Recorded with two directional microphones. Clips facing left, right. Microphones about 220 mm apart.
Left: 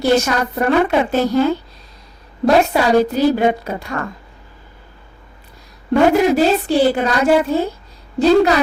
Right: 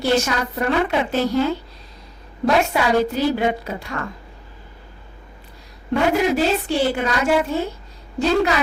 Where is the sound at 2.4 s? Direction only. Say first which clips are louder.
Left 5 dB; 35° left (ahead or behind).